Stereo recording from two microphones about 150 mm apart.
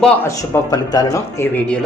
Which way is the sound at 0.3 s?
20° left (ahead or behind).